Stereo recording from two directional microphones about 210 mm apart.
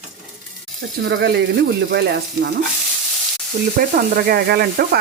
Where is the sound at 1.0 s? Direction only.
55° right (ahead or behind).